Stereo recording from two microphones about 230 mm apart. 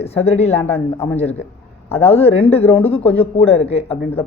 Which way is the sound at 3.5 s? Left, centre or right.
Left.